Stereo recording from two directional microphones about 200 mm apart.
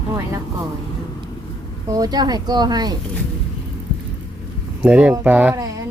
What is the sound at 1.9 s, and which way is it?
Speech, 20° right (ahead or behind).